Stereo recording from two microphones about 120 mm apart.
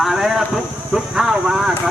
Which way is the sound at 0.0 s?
5° right (ahead or behind).